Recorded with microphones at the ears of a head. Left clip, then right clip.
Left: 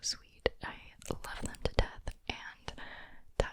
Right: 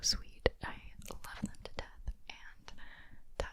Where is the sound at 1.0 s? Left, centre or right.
Left.